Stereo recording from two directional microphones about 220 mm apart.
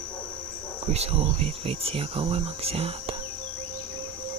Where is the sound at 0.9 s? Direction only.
30° right (ahead or behind).